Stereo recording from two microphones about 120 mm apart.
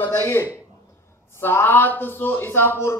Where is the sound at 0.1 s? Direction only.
20° left (ahead or behind).